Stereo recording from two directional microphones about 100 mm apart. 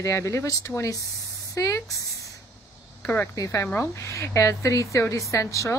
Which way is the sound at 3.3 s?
30° left (ahead or behind).